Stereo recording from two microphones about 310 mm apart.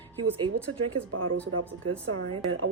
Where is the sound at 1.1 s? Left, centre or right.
Right.